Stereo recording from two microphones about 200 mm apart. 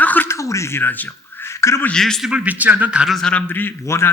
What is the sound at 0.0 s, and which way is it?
Speech, 10° left (ahead or behind).